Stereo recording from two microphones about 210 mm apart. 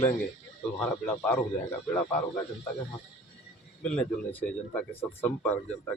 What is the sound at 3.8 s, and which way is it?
Speech, 5° left (ahead or behind).